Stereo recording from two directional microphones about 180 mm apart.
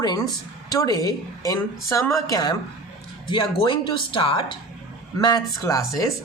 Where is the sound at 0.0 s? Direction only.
20° left (ahead or behind).